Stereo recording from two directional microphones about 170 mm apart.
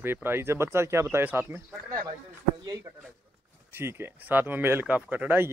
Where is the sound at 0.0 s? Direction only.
15° right (ahead or behind).